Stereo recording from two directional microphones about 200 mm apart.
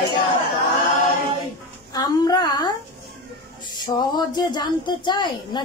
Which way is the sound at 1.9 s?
20° left (ahead or behind).